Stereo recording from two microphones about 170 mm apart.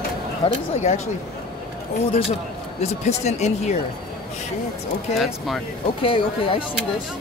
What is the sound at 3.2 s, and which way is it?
Speech, 40° left (ahead or behind).